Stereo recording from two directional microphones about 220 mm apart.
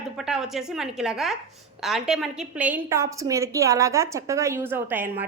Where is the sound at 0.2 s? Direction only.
Centre (ahead or behind).